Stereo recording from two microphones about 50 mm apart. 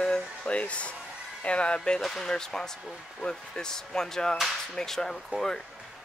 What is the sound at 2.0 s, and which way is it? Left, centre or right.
Speech, centre.